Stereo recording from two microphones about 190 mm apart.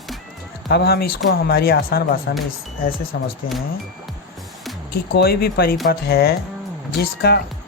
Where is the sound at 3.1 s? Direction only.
70° left (ahead or behind).